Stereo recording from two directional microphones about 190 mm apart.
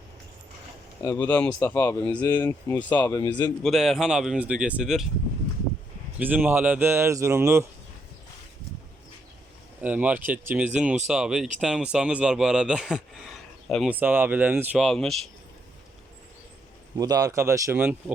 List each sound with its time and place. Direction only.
1.0 s speech: 15° left (ahead or behind)
3.2 s speech: 20° left (ahead or behind)
3.6 s speech: centre (ahead or behind)
6.1 s speech: 10° right (ahead or behind)
9.8 s speech: 10° right (ahead or behind)
17.0 s speech: 20° right (ahead or behind)